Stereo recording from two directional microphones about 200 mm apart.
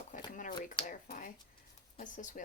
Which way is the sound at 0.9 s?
40° left (ahead or behind).